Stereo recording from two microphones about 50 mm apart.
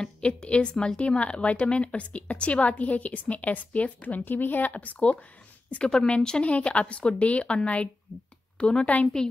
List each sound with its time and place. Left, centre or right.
0.0 s a woman's voice: centre